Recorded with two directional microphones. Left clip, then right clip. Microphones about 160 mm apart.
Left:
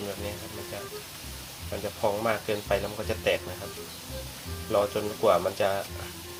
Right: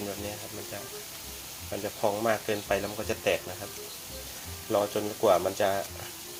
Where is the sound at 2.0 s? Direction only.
25° right (ahead or behind).